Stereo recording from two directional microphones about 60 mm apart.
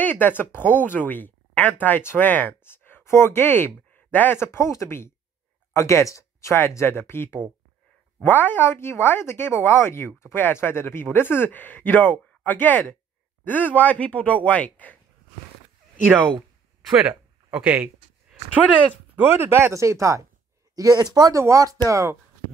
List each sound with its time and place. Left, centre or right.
0.0 s speech: left
3.9 s a sound: left
4.4 s speech: left
6.7 s speech: left
16.9 s speech: centre
19.2 s speech: right
19.7 s speech: right
20.7 s speech: right
21.4 s speech: right
21.6 s speech: right